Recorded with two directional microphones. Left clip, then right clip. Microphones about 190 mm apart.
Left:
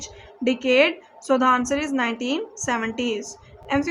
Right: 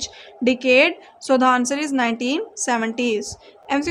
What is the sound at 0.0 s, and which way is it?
A woman's voice, 45° right (ahead or behind).